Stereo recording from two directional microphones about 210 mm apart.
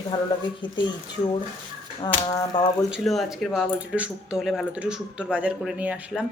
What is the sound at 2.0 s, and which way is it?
Speech, 20° left (ahead or behind).